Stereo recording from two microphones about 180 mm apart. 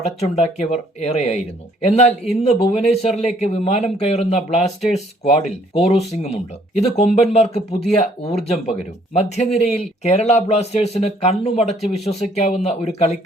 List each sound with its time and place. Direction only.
0.2 s a man's voice: 35° left (ahead or behind)